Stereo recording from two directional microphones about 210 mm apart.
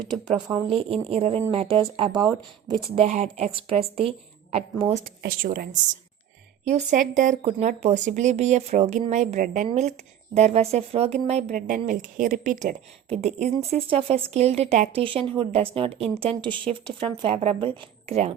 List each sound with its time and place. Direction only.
0.3 s speech: 20° right (ahead or behind)
5.0 s speech: 45° right (ahead or behind)